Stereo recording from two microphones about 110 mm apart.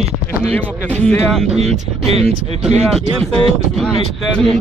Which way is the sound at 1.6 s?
65° right (ahead or behind).